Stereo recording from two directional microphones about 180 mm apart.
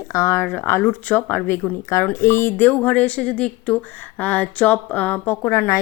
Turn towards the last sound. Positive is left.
turn(degrees=15)  # may be behind; listen again after turning